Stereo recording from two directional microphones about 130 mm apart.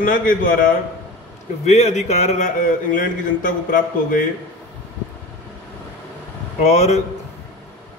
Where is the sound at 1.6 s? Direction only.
60° left (ahead or behind); by 4.2 s 90° left.